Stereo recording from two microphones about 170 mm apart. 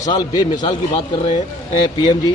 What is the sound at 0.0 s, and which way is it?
Speech, 20° left (ahead or behind).